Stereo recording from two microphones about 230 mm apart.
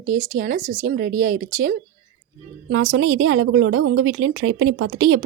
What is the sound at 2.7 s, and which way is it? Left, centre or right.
A woman's voice, right.